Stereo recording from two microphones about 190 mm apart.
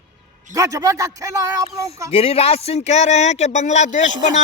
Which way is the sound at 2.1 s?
30° left (ahead or behind).